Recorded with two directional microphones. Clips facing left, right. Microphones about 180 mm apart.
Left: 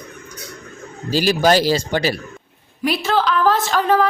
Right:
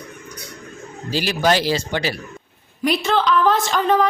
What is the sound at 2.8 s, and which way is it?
A woman's voice, 5° left (ahead or behind).